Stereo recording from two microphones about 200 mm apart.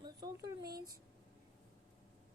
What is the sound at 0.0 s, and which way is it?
Speech, 20° right (ahead or behind).